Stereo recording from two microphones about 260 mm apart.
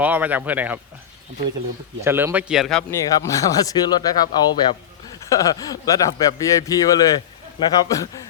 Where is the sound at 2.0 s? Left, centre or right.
Centre.